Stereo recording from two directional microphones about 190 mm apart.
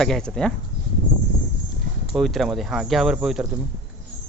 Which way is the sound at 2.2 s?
Centre (ahead or behind).